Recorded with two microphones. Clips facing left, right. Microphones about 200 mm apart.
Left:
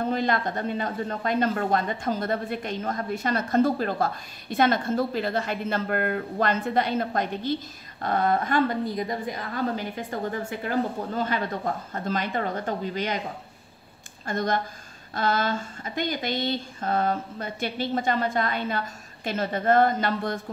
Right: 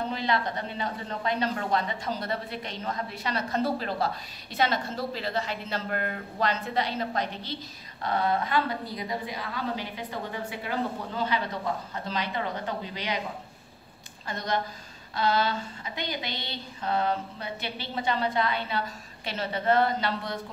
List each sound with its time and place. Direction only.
0.0 s speech: 50° left (ahead or behind)
14.2 s speech: 50° left (ahead or behind)